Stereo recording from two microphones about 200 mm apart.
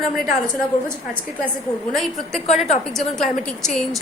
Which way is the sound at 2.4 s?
35° left (ahead or behind).